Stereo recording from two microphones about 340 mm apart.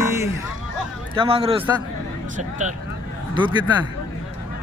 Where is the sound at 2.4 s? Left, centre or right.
Right.